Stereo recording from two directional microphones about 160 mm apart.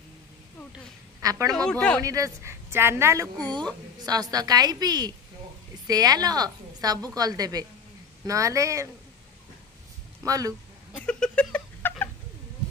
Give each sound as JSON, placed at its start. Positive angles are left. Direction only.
{"t": 1.2, "sound": "a man's voice", "side_deg": -20}
{"t": 1.5, "sound": "speech", "side_deg": 5}
{"t": 2.0, "sound": "a woman's voice", "side_deg": -20}
{"t": 10.2, "sound": "a woman's voice", "side_deg": -20}
{"t": 10.9, "sound": "cat", "side_deg": 10}